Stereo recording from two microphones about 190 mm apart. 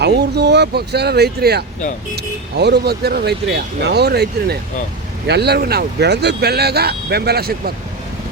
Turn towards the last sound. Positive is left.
turn(degrees=-55)  # may be behind; listen again after turning